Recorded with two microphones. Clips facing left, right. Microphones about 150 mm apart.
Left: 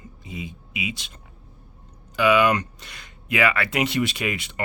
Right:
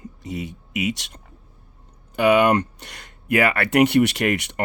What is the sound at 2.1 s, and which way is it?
Speech, 60° right (ahead or behind).